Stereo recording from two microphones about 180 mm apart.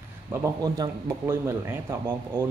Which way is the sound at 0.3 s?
20° right (ahead or behind).